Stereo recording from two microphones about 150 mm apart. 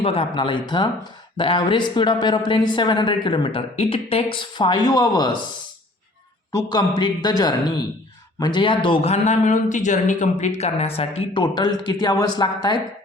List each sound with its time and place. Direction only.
0.0 s a man's voice: 35° left (ahead or behind)
6.5 s a man's voice: 25° left (ahead or behind)